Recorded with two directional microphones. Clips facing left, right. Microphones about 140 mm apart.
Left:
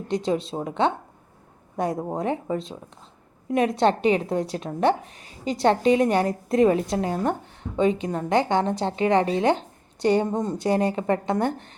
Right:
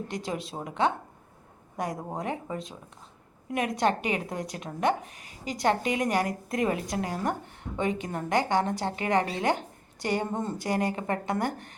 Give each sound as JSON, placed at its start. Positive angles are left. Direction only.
{"t": 0.1, "sound": "speech", "side_deg": 25}